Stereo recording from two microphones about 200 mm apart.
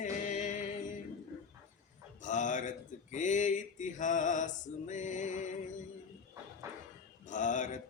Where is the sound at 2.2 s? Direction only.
40° left (ahead or behind).